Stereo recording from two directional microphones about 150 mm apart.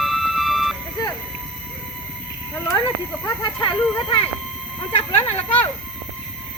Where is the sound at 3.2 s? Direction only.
30° left (ahead or behind).